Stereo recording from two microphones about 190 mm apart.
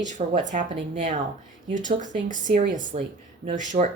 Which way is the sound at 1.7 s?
40° right (ahead or behind).